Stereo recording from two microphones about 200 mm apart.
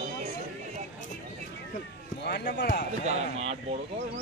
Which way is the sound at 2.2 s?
55° left (ahead or behind).